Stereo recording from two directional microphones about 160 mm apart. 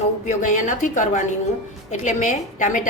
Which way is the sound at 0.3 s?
55° left (ahead or behind).